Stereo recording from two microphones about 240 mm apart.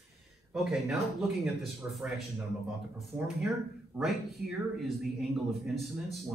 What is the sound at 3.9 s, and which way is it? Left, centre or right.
Speech, centre.